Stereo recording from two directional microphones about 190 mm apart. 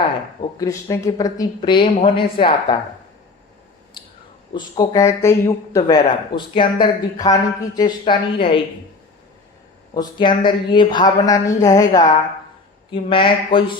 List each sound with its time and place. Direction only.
0.6 s a man's voice: 15° left (ahead or behind)
4.5 s a man's voice: 20° left (ahead or behind)
9.9 s a man's voice: 20° left (ahead or behind)